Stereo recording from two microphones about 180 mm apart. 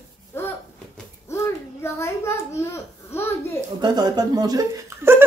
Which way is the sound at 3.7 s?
25° right (ahead or behind).